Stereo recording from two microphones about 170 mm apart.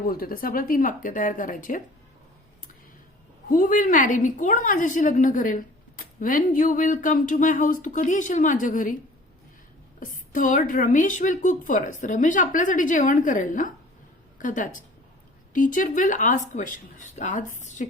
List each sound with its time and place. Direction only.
0.1 s a woman's voice: 60° left (ahead or behind)
3.5 s a woman's voice: 50° left (ahead or behind)
10.0 s a woman's voice: 50° left (ahead or behind)